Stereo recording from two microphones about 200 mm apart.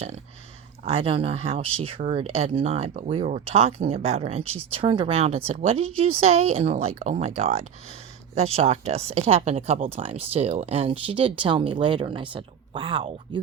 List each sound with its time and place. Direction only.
0.9 s speech: 30° right (ahead or behind)